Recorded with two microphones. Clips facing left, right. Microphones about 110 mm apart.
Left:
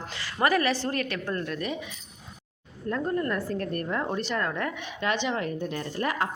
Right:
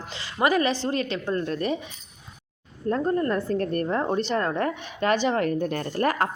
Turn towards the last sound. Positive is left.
turn(degrees=-50)  # may be behind; listen again after turning